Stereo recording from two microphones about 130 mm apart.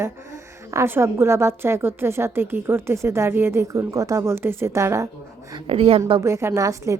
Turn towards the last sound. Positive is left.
turn(degrees=-25)  # may be behind; listen again after turning